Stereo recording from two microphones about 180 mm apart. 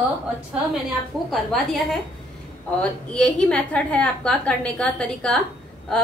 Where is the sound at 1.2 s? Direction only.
Centre (ahead or behind).